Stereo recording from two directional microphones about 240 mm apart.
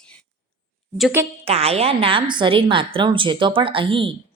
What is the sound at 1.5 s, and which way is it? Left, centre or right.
A woman's voice, right.